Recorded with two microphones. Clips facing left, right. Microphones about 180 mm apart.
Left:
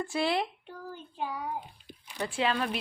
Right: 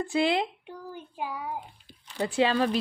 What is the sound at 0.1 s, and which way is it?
A child's voice, 20° right (ahead or behind).